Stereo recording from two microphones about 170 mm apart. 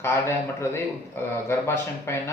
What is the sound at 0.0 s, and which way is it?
A man's voice, 15° left (ahead or behind).